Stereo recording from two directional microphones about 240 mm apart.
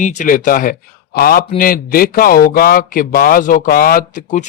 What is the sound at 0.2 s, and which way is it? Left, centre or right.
A man's voice, left.